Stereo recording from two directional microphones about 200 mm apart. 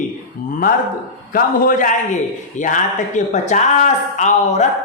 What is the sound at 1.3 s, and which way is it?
Speech, 45° left (ahead or behind).